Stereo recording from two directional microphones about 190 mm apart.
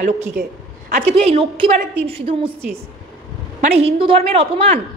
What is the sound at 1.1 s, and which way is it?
A woman's voice, 30° right (ahead or behind).